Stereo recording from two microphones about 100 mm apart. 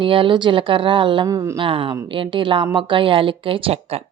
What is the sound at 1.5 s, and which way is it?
A woman's voice, 60° right (ahead or behind).